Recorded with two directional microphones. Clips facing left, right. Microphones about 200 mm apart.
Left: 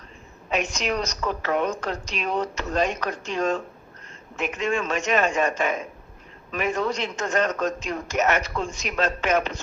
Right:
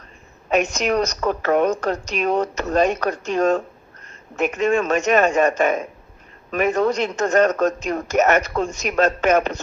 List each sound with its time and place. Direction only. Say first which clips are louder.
0.5 s a man's voice: right 7 dB; 45° right (ahead or behind)